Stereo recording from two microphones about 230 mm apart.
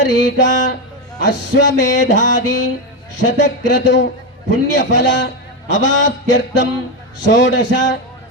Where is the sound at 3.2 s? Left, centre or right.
Left.